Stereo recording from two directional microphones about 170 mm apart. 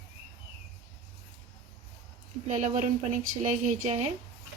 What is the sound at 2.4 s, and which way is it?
A woman's voice, 45° right (ahead or behind).